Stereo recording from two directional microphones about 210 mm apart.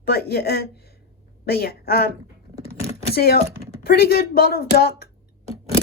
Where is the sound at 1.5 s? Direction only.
50° left (ahead or behind).